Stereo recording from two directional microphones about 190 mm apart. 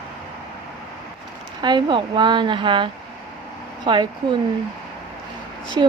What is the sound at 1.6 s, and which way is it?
A woman's voice, 25° right (ahead or behind).